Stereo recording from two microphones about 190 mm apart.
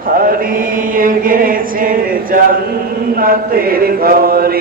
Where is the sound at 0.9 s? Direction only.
50° right (ahead or behind).